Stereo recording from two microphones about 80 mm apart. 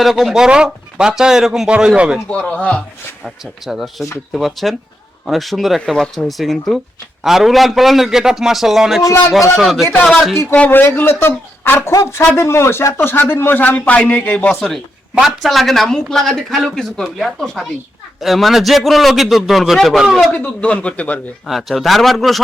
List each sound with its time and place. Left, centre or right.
0.0 s speech: centre
2.3 s speech: centre
3.2 s speech: centre
9.0 s a man's voice: left
9.6 s speech: centre
10.0 s speech: centre
10.5 s a man's voice: left
15.2 s speech: centre
20.3 s speech: centre
21.4 s speech: centre